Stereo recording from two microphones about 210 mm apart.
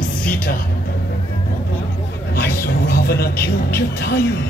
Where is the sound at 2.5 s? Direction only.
45° left (ahead or behind).